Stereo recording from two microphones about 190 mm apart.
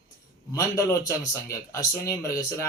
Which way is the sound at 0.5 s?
15° left (ahead or behind).